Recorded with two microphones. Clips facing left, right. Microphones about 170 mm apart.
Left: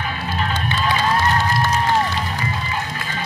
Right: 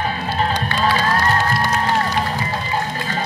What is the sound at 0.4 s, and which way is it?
Music, 40° right (ahead or behind).